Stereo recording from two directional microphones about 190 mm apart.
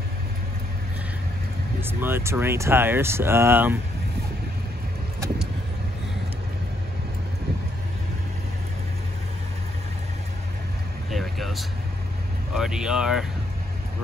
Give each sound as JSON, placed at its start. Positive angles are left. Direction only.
{"t": 1.8, "sound": "speech", "side_deg": -10}
{"t": 11.1, "sound": "vehicle", "side_deg": 0}
{"t": 12.5, "sound": "speech", "side_deg": -5}